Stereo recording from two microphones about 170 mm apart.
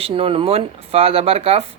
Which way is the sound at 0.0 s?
35° right (ahead or behind).